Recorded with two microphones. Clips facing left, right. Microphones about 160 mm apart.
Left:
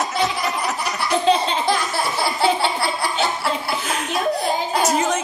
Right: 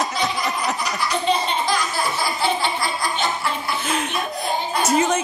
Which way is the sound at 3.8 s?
Centre (ahead or behind).